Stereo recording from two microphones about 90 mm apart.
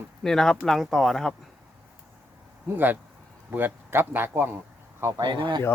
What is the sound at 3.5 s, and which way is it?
Speech, 20° right (ahead or behind).